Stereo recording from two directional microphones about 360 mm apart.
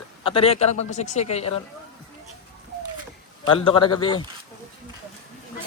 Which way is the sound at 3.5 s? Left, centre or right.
Centre.